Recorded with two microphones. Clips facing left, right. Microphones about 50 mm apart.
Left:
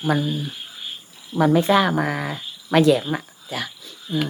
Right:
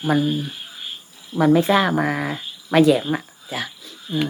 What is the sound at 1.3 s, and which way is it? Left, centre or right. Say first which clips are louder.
Speech: right 1 dB; centre.